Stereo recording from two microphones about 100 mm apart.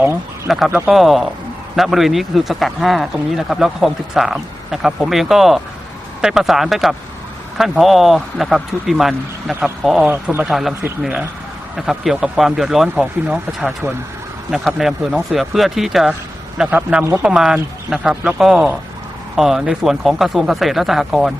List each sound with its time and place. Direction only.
0.4 s speech: 5° right (ahead or behind)
16.6 s a man's voice: 20° right (ahead or behind)
17.2 s speech: 5° right (ahead or behind)